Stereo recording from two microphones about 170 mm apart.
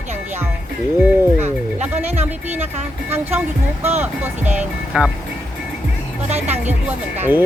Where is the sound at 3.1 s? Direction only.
10° right (ahead or behind).